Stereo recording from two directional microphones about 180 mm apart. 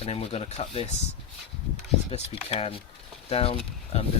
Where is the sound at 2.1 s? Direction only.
35° left (ahead or behind).